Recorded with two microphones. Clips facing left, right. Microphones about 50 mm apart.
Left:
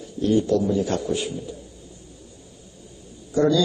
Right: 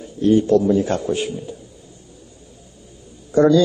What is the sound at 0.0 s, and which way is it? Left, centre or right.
A man's voice, right.